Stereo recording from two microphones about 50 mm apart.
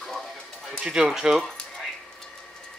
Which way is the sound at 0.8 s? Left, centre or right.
Centre.